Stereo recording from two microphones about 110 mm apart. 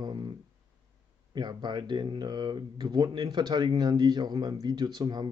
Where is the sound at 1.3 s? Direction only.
40° right (ahead or behind).